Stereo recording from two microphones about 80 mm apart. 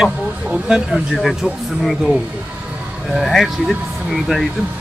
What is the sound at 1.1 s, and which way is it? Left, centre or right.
Speech, centre.